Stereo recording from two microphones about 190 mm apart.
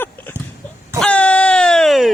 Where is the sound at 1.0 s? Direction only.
5° left (ahead or behind).